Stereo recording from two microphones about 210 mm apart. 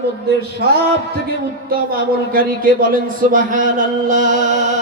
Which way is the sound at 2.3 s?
45° right (ahead or behind).